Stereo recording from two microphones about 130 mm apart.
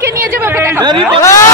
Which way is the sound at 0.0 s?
20° right (ahead or behind).